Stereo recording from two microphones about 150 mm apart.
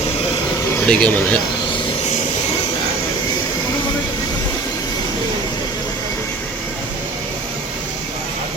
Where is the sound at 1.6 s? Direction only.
35° left (ahead or behind).